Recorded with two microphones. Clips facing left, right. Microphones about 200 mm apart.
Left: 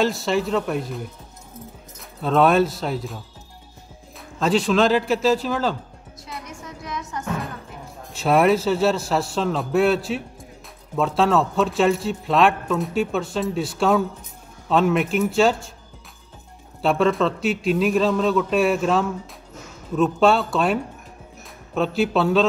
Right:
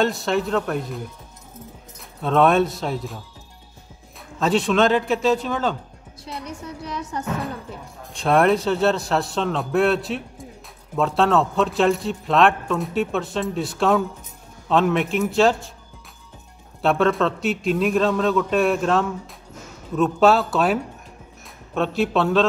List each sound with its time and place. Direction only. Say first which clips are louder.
0.0 s a man's voice: even; centre (ahead or behind)
4.4 s a man's voice: even; centre (ahead or behind)
6.4 s a woman's voice: right 4 dB; 35° right (ahead or behind)
8.1 s a man's voice: even; 5° left (ahead or behind)
16.8 s a man's voice: even; centre (ahead or behind)